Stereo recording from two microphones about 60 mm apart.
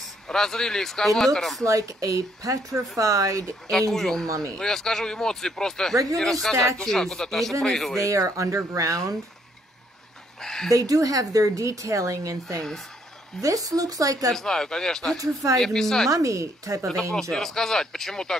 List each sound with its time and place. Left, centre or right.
0.0 s speech: centre
1.6 s a woman's voice: right
3.9 s speech: centre
4.3 s a woman's voice: right
4.6 s speech: centre
8.0 s speech: right
10.4 s a sound: centre
10.7 s a woman's voice: right
14.3 s speech: centre
16.1 s a woman's voice: right
17.1 s speech: centre